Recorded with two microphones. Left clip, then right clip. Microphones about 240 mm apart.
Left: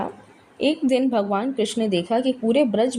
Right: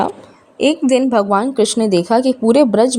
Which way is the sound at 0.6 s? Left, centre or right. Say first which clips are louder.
Right 7 dB; right.